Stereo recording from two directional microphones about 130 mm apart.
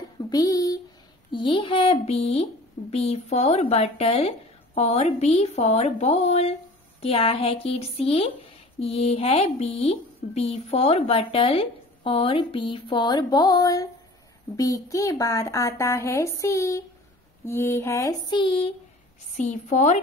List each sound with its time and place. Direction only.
0.3 s a sound: 30° left (ahead or behind)
1.3 s speech: 40° left (ahead or behind); by 18.3 s 25° left (ahead or behind)
18.3 s speech: 40° left (ahead or behind)
19.3 s a woman's voice: 65° left (ahead or behind)